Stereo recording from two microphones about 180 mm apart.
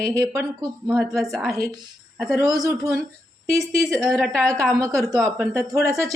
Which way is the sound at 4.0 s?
Centre (ahead or behind).